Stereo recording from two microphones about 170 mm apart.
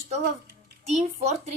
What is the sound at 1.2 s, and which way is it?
Speech, 40° right (ahead or behind).